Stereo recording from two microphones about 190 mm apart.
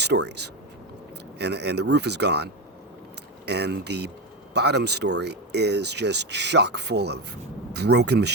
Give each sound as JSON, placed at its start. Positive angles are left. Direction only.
{"t": 0.0, "sound": "speech", "side_deg": -60}